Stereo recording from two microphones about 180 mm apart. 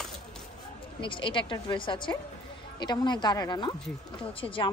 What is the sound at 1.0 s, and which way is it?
Speech, 25° left (ahead or behind).